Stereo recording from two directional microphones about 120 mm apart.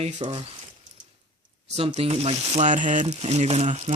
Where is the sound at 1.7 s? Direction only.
60° right (ahead or behind); by 3.0 s 90° right.